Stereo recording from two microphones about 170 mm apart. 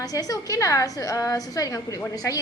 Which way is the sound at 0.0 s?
20° left (ahead or behind).